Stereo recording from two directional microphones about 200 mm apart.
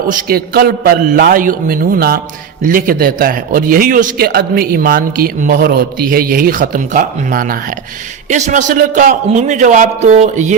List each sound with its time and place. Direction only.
0.1 s a man's voice: 45° right (ahead or behind)